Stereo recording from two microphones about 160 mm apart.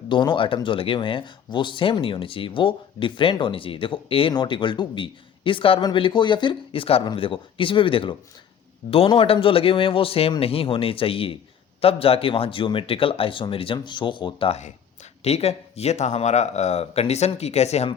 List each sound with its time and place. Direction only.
0.1 s speech: 30° left (ahead or behind)